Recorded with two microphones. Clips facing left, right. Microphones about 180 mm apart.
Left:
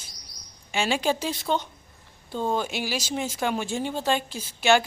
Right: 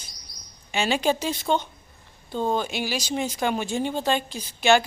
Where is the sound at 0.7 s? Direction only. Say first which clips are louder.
Right 2 dB; 5° left (ahead or behind).